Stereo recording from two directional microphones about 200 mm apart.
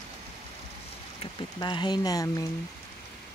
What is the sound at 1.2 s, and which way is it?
Speech, 20° left (ahead or behind).